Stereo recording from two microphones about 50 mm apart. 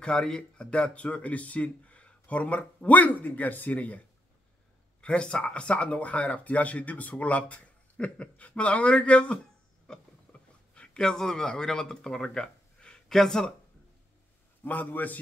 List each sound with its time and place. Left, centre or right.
0.0 s speech: centre
5.0 s speech: left
9.9 s a sound: centre
10.7 s speech: centre
14.6 s a man's voice: left